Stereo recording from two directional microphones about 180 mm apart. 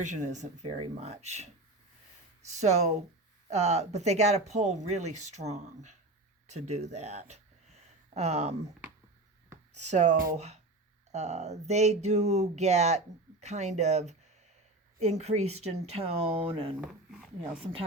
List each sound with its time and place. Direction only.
0.0 s speech: 40° right (ahead or behind)
2.5 s speech: 40° right (ahead or behind)
9.9 s speech: 40° right (ahead or behind)